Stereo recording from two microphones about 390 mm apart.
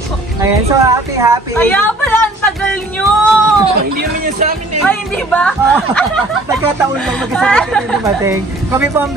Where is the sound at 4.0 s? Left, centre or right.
Right.